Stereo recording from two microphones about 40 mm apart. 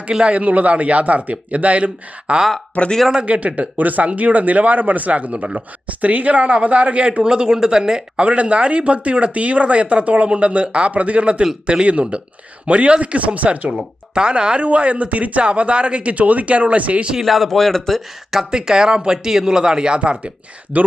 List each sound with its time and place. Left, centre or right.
0.1 s speech: right
0.3 s speech: right
2.8 s speech: left
3.2 s speech: right
8.2 s speech: right
13.7 s speech: right
17.2 s speech: centre
18.5 s speech: centre
20.0 s speech: right